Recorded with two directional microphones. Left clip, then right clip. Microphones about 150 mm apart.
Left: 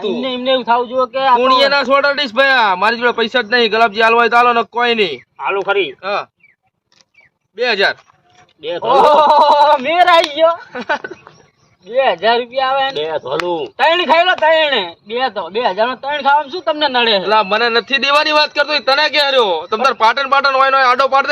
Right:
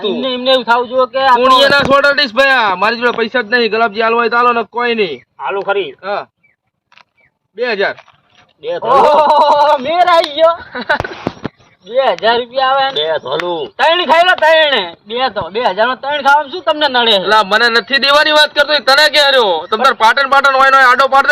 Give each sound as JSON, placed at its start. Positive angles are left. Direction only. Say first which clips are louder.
{"t": 0.0, "sound": "speech", "louder": "right 3 dB", "side_deg": -5}
{"t": 7.5, "sound": "speech", "louder": "left 1 dB", "side_deg": 0}
{"t": 8.9, "sound": "speech", "louder": "right 1 dB", "side_deg": -5}
{"t": 10.7, "sound": "speech", "louder": "right 4 dB", "side_deg": 15}
{"t": 11.9, "sound": "speech", "louder": "right 1 dB", "side_deg": 0}
{"t": 12.9, "sound": "speech", "louder": "right 4 dB", "side_deg": 15}
{"t": 13.7, "sound": "speech", "louder": "right 2 dB", "side_deg": 0}